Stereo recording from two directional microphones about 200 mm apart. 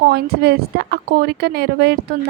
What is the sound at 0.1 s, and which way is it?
Speech, 55° right (ahead or behind).